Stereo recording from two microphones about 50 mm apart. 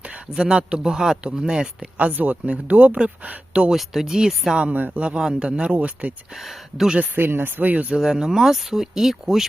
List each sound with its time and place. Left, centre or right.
0.3 s speech: centre
2.0 s speech: right
3.7 s a man's voice: centre
5.7 s a man's voice: right
6.4 s speech: centre
7.2 s speech: right
7.9 s speech: centre